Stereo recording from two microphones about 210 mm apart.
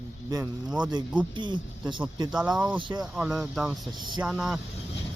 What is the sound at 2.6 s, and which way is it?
Speech, 5° right (ahead or behind).